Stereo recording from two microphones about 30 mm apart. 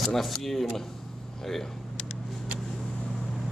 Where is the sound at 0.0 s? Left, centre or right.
Centre.